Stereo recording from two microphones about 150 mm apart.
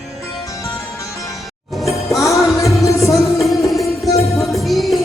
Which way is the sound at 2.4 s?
Centre (ahead or behind).